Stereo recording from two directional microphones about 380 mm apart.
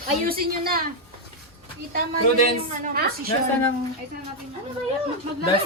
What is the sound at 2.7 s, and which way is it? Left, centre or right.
Speech, centre.